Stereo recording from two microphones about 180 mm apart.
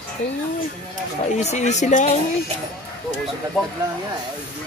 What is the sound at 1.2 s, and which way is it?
Speech, 40° left (ahead or behind).